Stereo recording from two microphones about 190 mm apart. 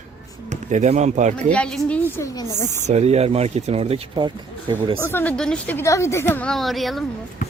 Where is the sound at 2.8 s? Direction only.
35° right (ahead or behind).